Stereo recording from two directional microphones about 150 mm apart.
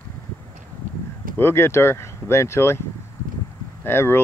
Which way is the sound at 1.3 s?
15° left (ahead or behind).